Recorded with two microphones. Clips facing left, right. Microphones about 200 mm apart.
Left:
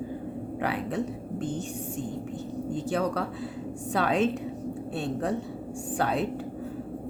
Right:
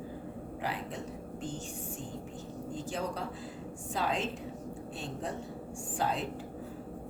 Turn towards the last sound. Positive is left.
turn(degrees=70)  # may be behind; listen again after turning